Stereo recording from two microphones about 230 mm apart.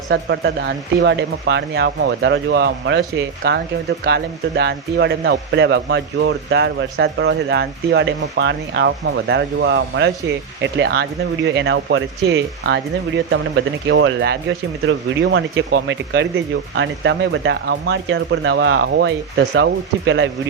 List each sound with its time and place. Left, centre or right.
0.1 s speech: right